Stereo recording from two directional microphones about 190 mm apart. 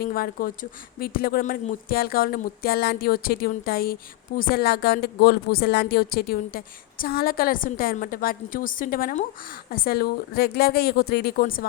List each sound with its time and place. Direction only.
0.0 s a woman's voice: 50° left (ahead or behind)